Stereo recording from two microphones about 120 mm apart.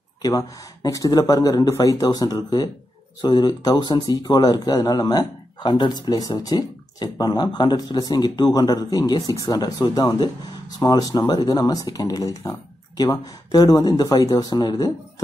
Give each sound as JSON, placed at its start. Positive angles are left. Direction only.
{"t": 0.2, "sound": "speech", "side_deg": 30}